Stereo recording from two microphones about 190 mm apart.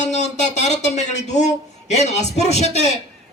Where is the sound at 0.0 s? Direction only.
40° left (ahead or behind).